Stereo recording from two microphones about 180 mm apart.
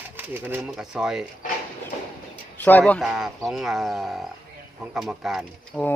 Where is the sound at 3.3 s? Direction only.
Centre (ahead or behind).